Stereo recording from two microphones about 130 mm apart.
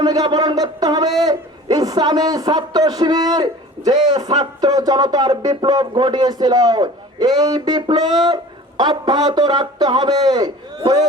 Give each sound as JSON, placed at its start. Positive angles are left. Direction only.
{"t": 0.0, "sound": "speech", "side_deg": -30}